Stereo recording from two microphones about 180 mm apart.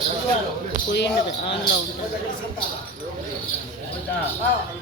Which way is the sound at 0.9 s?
70° left (ahead or behind).